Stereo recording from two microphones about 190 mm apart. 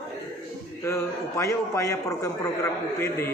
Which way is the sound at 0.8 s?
15° left (ahead or behind).